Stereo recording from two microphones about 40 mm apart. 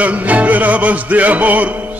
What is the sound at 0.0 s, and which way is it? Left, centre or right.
Music, right.